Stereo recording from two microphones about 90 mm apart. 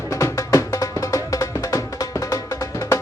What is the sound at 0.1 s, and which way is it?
Music, 35° left (ahead or behind).